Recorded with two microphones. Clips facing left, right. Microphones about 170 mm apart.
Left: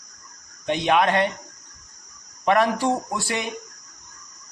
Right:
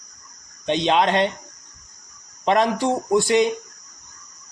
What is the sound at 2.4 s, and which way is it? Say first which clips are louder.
Speech: right 1 dB; 20° right (ahead or behind).